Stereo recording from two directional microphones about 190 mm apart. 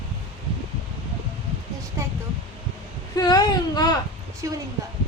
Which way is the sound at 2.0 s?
15° right (ahead or behind).